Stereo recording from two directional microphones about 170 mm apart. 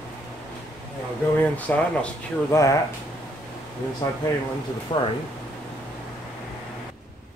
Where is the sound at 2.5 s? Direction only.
20° left (ahead or behind).